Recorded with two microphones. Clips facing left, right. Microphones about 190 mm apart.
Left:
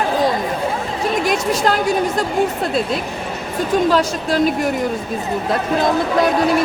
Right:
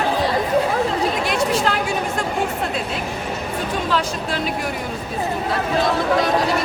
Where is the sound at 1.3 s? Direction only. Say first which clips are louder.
Left 2 dB; 40° left (ahead or behind).